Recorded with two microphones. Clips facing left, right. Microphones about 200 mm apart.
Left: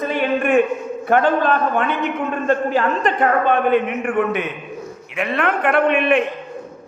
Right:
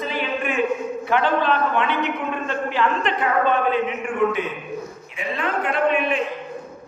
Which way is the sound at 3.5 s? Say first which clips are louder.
Left 4 dB; 60° left (ahead or behind).